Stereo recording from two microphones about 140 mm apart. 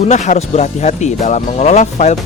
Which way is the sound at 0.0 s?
55° left (ahead or behind).